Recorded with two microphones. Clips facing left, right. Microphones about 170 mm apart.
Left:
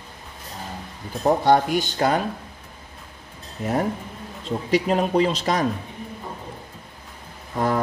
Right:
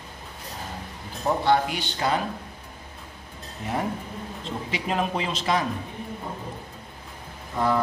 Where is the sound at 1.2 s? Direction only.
45° left (ahead or behind).